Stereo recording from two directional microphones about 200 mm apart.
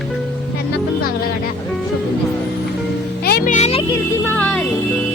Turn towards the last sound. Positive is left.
turn(degrees=5)  # may be behind; listen again after turning